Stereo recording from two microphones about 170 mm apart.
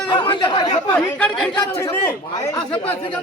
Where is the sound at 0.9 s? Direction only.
5° left (ahead or behind).